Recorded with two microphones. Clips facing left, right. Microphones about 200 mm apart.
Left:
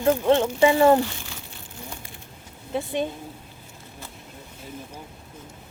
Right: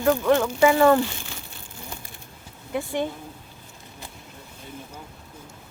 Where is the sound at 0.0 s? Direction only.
25° left (ahead or behind).